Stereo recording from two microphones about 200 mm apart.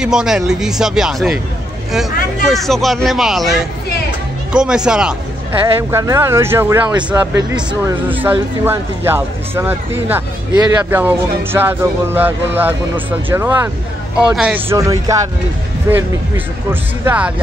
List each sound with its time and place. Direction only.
0.0 s speech: 5° right (ahead or behind)
2.4 s speech: centre (ahead or behind)